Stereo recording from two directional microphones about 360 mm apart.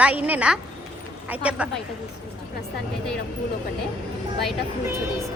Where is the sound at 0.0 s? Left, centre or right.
Centre.